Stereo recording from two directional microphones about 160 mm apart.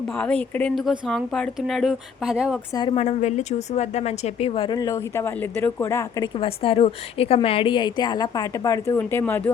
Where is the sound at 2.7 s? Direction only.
35° left (ahead or behind); by 6.2 s 20° left (ahead or behind).